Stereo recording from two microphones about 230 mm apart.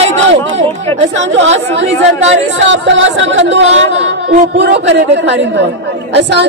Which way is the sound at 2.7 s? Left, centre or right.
Right.